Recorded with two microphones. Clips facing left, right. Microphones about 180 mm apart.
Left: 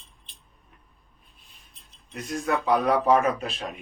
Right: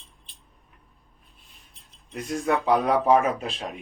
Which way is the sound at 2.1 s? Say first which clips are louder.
Right 2 dB; 25° right (ahead or behind).